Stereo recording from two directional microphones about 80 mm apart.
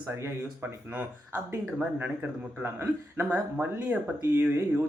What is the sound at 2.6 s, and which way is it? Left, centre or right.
A man's voice, right.